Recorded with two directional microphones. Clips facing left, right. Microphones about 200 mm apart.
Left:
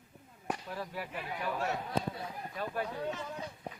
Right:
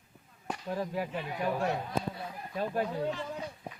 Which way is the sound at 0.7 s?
40° right (ahead or behind).